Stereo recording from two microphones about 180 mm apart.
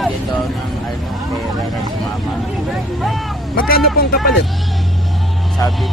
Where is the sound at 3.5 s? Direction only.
55° left (ahead or behind).